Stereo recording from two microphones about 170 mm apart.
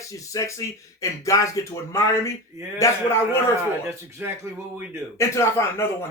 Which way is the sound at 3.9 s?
15° right (ahead or behind).